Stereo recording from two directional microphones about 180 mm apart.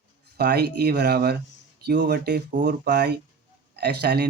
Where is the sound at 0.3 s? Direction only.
65° right (ahead or behind).